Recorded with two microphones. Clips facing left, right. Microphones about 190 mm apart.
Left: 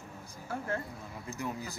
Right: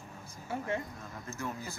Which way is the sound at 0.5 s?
5° right (ahead or behind).